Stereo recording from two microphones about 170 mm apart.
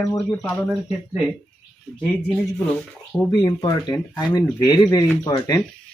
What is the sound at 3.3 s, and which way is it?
Speech, 25° left (ahead or behind).